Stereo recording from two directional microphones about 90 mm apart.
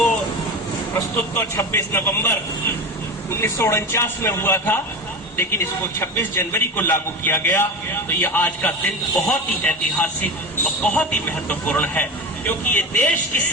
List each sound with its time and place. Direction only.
0.9 s a man's voice: 30° left (ahead or behind)